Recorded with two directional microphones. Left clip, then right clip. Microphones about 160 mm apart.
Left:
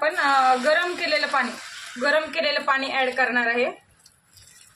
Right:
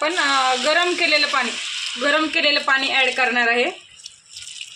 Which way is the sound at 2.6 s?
55° right (ahead or behind).